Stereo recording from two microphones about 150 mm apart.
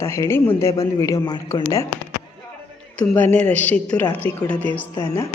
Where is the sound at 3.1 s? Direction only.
10° left (ahead or behind).